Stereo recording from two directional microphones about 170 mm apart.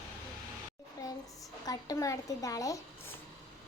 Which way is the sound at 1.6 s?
20° left (ahead or behind).